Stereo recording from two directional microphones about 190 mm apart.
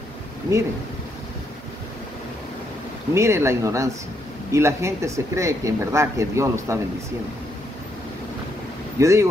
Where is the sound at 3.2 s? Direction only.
15° right (ahead or behind).